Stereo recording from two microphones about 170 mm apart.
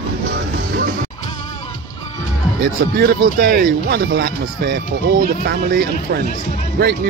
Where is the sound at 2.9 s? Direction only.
75° right (ahead or behind).